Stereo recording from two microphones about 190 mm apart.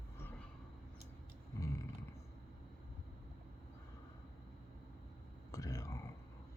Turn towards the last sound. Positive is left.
turn(degrees=15)  # may be behind; listen again after turning